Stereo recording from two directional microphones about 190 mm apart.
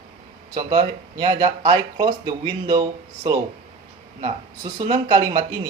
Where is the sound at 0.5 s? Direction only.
20° right (ahead or behind).